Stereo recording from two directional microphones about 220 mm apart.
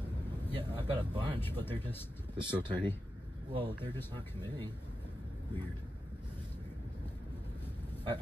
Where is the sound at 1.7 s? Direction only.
10° left (ahead or behind).